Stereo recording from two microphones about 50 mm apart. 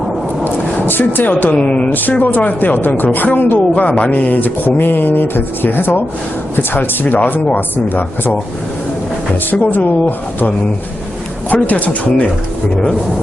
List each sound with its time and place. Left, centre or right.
0.4 s a sound: left
1.5 s speech: left
1.9 s speech: left
9.5 s speech: left